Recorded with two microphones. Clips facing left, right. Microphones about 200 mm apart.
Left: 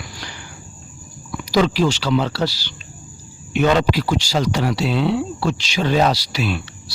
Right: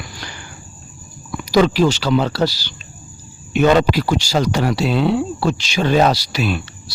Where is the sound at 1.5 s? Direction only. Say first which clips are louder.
Right 3 dB; 50° right (ahead or behind).